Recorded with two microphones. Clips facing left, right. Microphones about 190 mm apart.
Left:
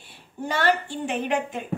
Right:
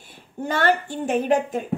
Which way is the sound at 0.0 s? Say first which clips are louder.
Right 3 dB; 50° right (ahead or behind).